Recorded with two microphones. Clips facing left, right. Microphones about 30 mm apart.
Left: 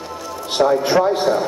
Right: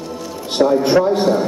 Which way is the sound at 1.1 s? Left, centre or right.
Centre.